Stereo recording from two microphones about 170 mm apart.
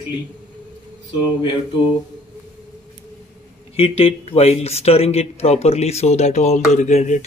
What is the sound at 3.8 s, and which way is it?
Speech, 35° left (ahead or behind).